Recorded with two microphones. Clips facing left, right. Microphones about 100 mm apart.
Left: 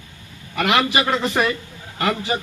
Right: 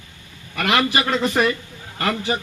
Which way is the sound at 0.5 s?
10° left (ahead or behind).